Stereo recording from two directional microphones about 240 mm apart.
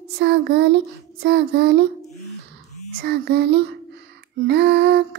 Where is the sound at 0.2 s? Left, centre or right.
Right.